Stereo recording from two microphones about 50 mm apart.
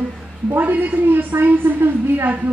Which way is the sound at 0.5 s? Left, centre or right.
Right.